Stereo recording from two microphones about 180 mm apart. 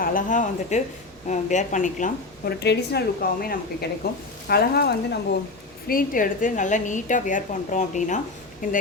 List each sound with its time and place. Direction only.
0.0 s a woman's voice: 45° left (ahead or behind)
2.6 s a woman's voice: 65° left (ahead or behind)
5.9 s a woman's voice: 50° left (ahead or behind)